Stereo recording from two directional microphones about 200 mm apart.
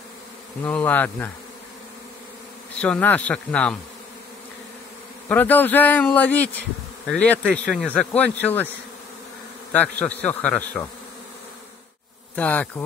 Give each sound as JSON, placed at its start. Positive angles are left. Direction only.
{"t": 0.7, "sound": "speech", "side_deg": 5}
{"t": 2.8, "sound": "speech", "side_deg": 10}
{"t": 5.3, "sound": "speech", "side_deg": 10}
{"t": 9.7, "sound": "speech", "side_deg": 10}
{"t": 12.4, "sound": "speech", "side_deg": 10}